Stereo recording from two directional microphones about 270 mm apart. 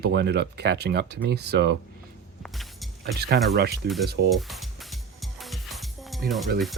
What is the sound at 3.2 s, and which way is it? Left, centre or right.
Speech, right.